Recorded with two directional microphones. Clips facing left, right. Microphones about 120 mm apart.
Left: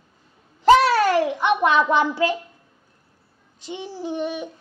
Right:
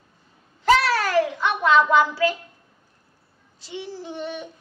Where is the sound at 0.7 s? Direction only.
20° left (ahead or behind).